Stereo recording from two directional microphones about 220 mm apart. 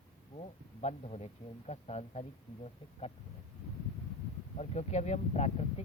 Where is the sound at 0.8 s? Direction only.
30° left (ahead or behind).